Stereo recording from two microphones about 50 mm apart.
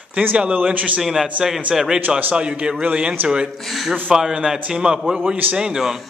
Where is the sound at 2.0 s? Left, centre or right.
Right.